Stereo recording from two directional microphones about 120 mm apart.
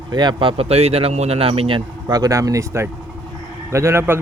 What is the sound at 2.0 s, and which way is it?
A man's voice, 35° right (ahead or behind).